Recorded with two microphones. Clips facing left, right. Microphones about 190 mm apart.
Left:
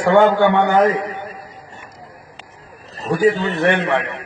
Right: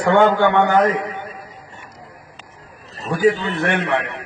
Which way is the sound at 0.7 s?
20° left (ahead or behind).